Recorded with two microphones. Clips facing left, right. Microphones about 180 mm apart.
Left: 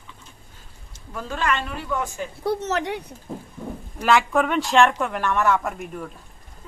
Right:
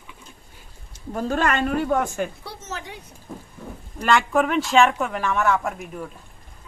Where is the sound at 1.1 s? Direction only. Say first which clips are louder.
Right 4 dB; 45° right (ahead or behind).